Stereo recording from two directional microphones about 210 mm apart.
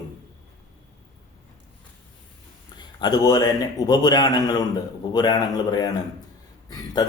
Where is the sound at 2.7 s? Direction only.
20° left (ahead or behind).